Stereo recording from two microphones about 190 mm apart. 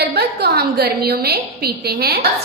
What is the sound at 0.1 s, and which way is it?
A woman's voice, 60° right (ahead or behind).